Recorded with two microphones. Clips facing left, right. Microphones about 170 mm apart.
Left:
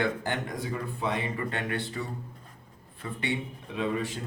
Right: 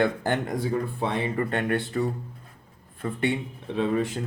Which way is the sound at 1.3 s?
50° right (ahead or behind).